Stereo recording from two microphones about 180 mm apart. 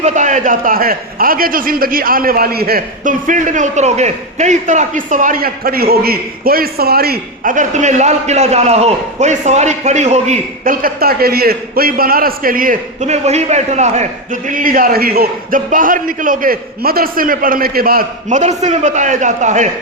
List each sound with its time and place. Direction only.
0.0 s a man's voice: 45° right (ahead or behind)